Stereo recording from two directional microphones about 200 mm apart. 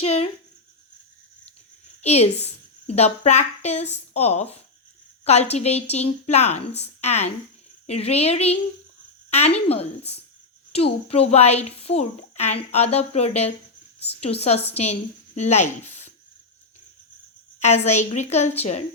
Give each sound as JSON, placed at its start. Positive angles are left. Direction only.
{"t": 0.0, "sound": "a sound", "side_deg": 30}
{"t": 2.0, "sound": "a woman's voice", "side_deg": 30}
{"t": 17.6, "sound": "a woman's voice", "side_deg": 35}